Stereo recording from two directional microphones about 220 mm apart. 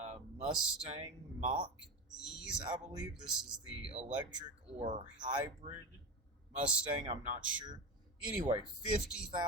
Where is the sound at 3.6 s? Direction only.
25° right (ahead or behind).